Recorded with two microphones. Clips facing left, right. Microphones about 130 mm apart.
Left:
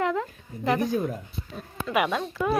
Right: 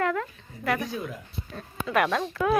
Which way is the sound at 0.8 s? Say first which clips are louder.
Left 7 dB; 45° left (ahead or behind).